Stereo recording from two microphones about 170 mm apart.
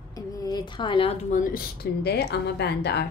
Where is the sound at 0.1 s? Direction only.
20° left (ahead or behind).